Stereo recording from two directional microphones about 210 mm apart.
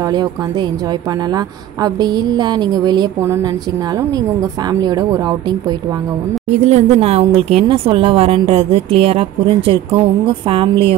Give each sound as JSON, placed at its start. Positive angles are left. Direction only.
{"t": 1.3, "sound": "speech", "side_deg": -20}
{"t": 4.8, "sound": "speech", "side_deg": -20}
{"t": 6.5, "sound": "speech", "side_deg": -35}